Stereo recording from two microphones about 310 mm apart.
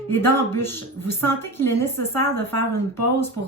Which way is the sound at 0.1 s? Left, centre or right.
Centre.